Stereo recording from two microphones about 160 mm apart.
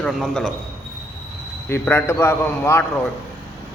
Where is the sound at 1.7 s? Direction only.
15° left (ahead or behind).